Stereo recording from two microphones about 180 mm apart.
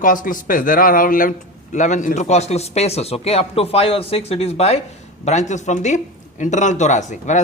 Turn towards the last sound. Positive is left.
turn(degrees=40)  # may be behind; listen again after turning